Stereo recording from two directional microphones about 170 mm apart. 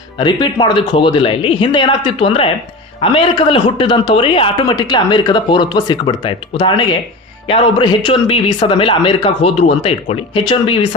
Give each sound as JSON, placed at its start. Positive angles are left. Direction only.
{"t": 0.2, "sound": "a man's voice", "side_deg": 30}